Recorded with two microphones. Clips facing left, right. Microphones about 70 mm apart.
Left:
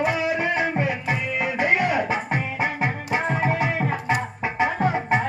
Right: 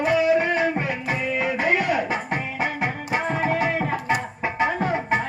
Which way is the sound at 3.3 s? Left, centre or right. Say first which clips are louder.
Right 1 dB; centre.